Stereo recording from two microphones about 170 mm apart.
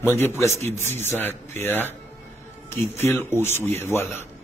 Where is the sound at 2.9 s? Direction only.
15° left (ahead or behind).